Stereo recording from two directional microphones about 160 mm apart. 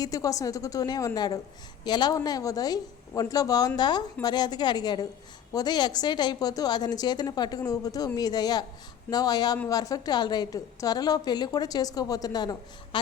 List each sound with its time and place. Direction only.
0.0 s a woman's voice: 20° left (ahead or behind)